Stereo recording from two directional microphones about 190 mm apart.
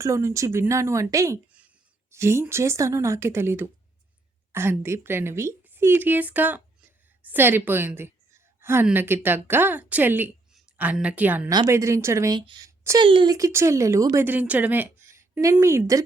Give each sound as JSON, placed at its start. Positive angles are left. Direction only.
{"t": 0.0, "sound": "a woman's voice", "side_deg": -15}